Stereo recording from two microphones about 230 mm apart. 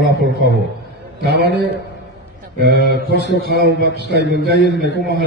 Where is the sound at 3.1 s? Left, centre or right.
Left.